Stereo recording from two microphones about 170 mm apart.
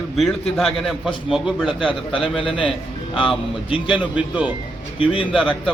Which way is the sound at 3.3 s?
30° left (ahead or behind).